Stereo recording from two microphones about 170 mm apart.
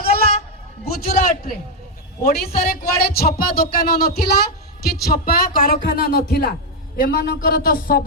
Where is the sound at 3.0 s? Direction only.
65° left (ahead or behind).